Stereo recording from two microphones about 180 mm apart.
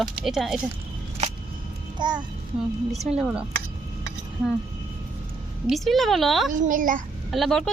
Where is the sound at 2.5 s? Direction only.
5° right (ahead or behind).